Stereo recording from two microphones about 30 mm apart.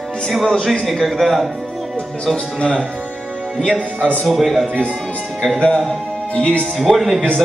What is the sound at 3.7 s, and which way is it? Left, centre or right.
Speech, right.